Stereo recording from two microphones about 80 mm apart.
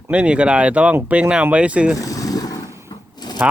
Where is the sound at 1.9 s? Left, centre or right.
Left.